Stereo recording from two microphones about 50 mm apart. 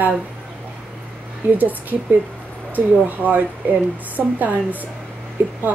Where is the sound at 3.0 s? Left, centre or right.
Right.